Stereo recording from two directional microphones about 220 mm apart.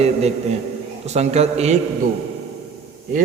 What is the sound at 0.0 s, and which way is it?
A man's voice, 30° right (ahead or behind).